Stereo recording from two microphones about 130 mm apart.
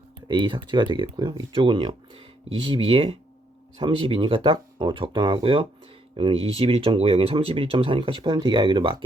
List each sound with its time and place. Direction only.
0.3 s speech: 35° right (ahead or behind)